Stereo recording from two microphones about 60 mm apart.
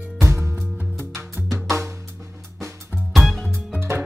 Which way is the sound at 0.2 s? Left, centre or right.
Right.